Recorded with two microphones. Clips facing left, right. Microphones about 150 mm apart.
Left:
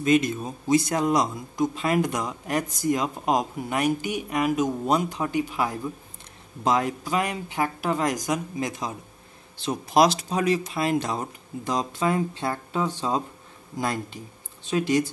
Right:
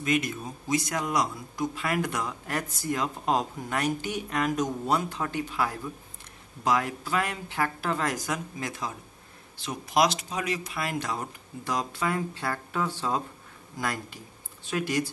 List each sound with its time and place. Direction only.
0.0 s speech: 25° left (ahead or behind)